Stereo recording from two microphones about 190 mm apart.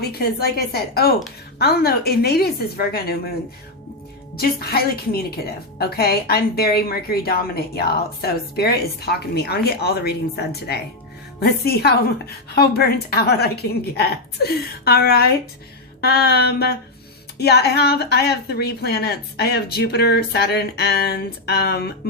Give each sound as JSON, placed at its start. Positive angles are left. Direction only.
{"t": 0.0, "sound": "a woman's voice", "side_deg": 55}
{"t": 4.4, "sound": "a woman's voice", "side_deg": 55}